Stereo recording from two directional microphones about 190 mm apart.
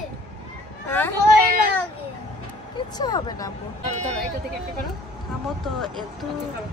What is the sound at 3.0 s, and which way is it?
Speech, 20° left (ahead or behind).